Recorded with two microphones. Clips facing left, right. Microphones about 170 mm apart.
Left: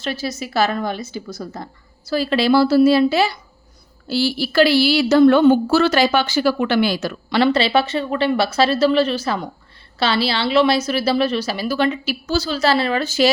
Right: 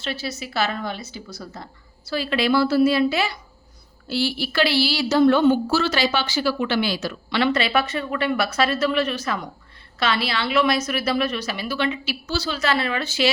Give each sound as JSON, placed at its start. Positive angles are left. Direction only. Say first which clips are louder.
{"t": 0.0, "sound": "a woman's voice", "louder": "left 4 dB", "side_deg": 40}